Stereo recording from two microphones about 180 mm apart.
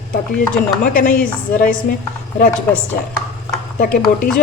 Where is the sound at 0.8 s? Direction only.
50° left (ahead or behind).